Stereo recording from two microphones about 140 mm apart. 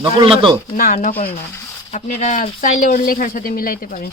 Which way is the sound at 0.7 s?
70° left (ahead or behind).